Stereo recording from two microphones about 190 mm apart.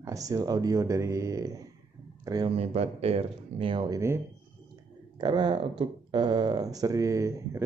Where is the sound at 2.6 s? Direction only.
35° right (ahead or behind); by 4.2 s 15° right (ahead or behind).